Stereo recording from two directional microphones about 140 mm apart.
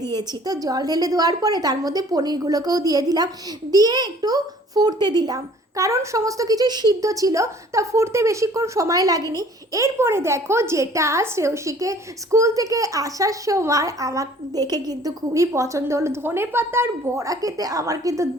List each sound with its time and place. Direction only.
0.2 s a child's voice: 25° right (ahead or behind)